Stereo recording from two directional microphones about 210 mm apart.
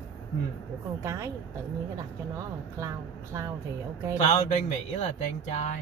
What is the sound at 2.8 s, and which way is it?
Speech, 15° right (ahead or behind).